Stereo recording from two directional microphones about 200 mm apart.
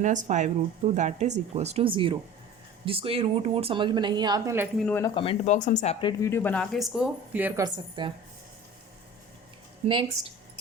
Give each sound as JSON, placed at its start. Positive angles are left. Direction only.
{"t": 0.0, "sound": "a woman's voice", "side_deg": -40}
{"t": 4.8, "sound": "speech", "side_deg": 10}
{"t": 5.1, "sound": "speech", "side_deg": 25}
{"t": 6.3, "sound": "speech", "side_deg": 10}
{"t": 9.8, "sound": "a woman's voice", "side_deg": -25}